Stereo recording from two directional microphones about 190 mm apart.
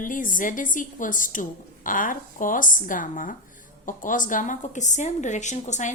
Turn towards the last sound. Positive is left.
turn(degrees=40)  # may be behind; listen again after turning